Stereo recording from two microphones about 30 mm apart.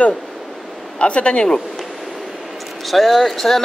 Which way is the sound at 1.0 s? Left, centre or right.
Left.